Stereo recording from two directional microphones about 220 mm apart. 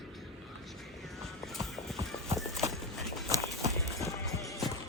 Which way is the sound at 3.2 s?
15° right (ahead or behind).